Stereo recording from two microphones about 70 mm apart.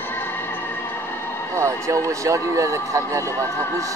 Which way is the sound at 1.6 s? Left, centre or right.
Right.